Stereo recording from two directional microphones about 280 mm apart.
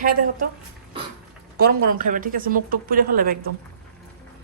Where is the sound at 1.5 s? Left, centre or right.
Right.